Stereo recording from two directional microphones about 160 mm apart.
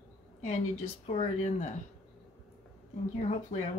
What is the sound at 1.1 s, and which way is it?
Speech, 45° left (ahead or behind).